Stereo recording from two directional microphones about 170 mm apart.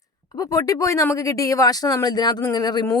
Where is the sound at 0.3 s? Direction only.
20° left (ahead or behind).